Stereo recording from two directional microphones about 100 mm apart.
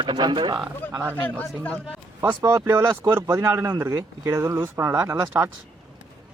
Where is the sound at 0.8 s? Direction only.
15° left (ahead or behind).